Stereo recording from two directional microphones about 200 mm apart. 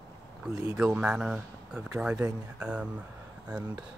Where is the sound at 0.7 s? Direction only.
5° right (ahead or behind).